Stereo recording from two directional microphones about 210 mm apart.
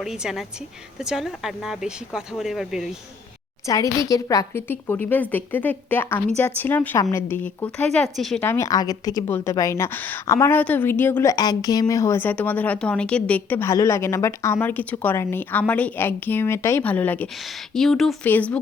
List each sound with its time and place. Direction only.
0.0 s speech: 5° right (ahead or behind)
3.7 s a woman's voice: 15° left (ahead or behind); by 8.4 s centre (ahead or behind)
8.4 s a woman's voice: 15° left (ahead or behind)